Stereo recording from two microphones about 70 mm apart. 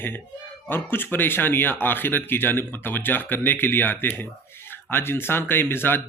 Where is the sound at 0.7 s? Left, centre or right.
Left.